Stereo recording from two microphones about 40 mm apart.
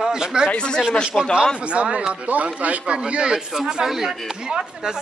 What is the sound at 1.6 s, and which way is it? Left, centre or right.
Speech, right.